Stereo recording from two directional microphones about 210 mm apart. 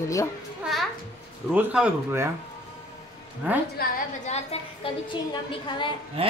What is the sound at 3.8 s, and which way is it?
A woman's voice, 30° left (ahead or behind).